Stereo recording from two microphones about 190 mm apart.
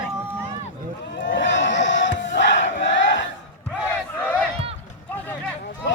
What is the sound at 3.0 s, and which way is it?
Battle cry, 75° left (ahead or behind).